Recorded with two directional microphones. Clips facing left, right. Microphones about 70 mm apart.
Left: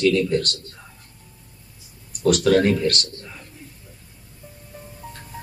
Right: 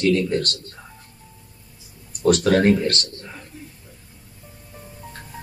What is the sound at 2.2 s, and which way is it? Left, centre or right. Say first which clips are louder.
Speech: even; right.